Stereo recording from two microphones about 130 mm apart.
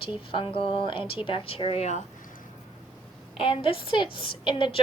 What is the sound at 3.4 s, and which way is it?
A woman's voice, 45° left (ahead or behind).